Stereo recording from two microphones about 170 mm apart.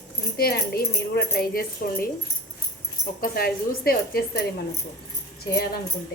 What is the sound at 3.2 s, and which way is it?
Speech, 60° left (ahead or behind).